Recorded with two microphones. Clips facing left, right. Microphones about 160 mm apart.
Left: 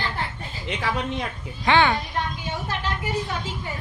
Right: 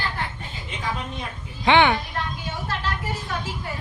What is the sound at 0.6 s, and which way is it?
Speech, 80° left.